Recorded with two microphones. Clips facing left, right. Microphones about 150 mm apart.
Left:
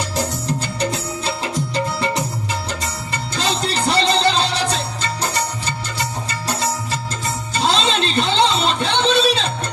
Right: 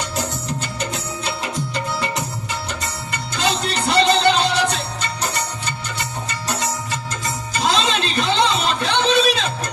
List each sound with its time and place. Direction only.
0.2 s music: 35° left (ahead or behind)
3.3 s music: 30° left (ahead or behind)